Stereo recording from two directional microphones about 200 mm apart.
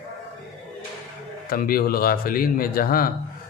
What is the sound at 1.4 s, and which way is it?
Speech, 45° left (ahead or behind).